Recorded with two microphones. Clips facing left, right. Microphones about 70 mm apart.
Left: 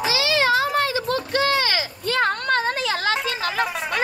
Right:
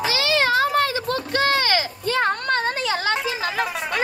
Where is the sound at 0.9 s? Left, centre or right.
Right.